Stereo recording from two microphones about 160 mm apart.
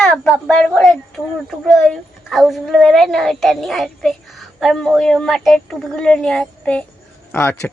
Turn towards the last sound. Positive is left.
turn(degrees=15)  # may be behind; listen again after turning